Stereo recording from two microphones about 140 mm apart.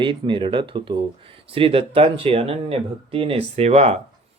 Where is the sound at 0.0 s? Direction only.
35° right (ahead or behind).